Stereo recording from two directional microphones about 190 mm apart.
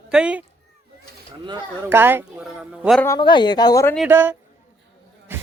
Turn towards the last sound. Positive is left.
turn(degrees=-10)  # may be behind; listen again after turning